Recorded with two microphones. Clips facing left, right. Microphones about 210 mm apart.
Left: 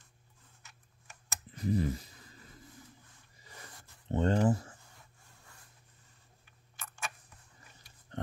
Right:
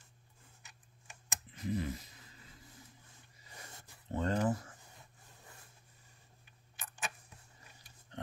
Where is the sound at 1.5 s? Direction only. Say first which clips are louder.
Left 5 dB; 35° left (ahead or behind).